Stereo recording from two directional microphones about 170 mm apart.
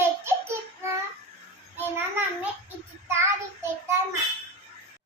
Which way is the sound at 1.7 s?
10° right (ahead or behind).